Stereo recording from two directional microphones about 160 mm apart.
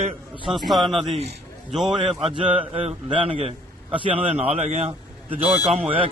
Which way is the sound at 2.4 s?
35° right (ahead or behind).